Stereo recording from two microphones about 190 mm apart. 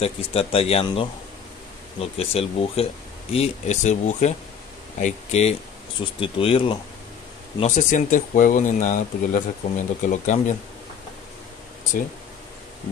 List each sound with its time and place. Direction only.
0.0 s speech: 30° left (ahead or behind)
7.6 s speech: 40° left (ahead or behind)